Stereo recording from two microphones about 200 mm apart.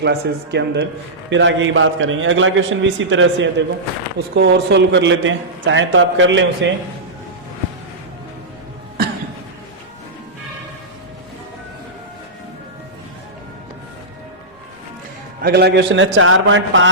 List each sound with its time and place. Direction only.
0.0 s a man's voice: 60° right (ahead or behind)
4.4 s a man's voice: 60° right (ahead or behind)
15.4 s a man's voice: 50° right (ahead or behind); by 16.9 s 70° right (ahead or behind)